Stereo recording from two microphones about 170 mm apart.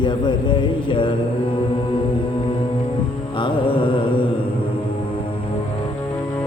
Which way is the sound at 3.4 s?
30° left (ahead or behind).